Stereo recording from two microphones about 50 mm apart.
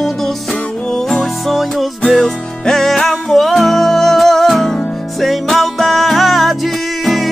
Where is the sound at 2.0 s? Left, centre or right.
Centre.